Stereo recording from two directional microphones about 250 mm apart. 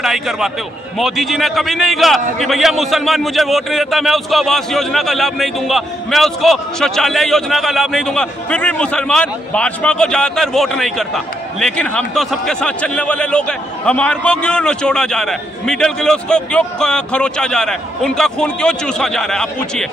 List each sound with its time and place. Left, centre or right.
0.0 s a man's voice: centre